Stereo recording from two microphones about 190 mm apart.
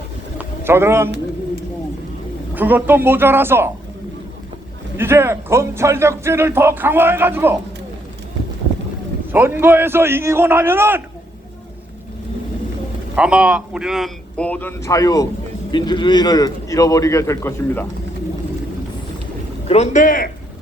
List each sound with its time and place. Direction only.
0.3 s a sound: 10° right (ahead or behind)
2.6 s speech: 10° right (ahead or behind)
4.9 s speech: 15° right (ahead or behind)
9.3 s speech: 10° right (ahead or behind)
13.1 s a man's voice: 5° right (ahead or behind); by 17.8 s 15° left (ahead or behind)
19.6 s a man's voice: 35° left (ahead or behind)